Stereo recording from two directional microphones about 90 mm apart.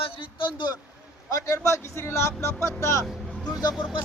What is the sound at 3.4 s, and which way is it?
Speech, 50° left (ahead or behind).